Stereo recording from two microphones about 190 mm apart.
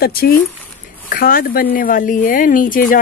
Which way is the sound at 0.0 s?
50° left (ahead or behind).